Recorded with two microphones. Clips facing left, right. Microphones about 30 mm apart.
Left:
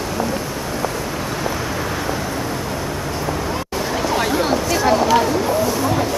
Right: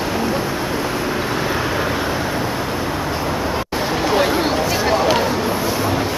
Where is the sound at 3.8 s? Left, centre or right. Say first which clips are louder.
Right 3 dB; right.